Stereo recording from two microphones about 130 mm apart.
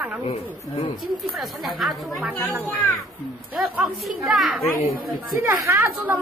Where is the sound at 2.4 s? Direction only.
20° right (ahead or behind).